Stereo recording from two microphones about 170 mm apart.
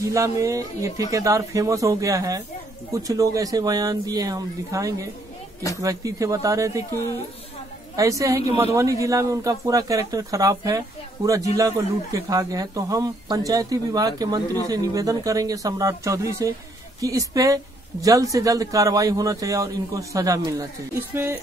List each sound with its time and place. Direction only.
0.0 s a man's voice: 20° right (ahead or behind)